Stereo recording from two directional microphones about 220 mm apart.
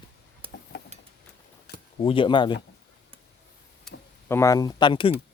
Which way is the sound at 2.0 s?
25° left (ahead or behind).